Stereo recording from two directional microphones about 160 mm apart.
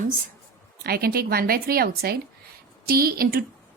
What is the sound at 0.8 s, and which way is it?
Speech, 75° right (ahead or behind).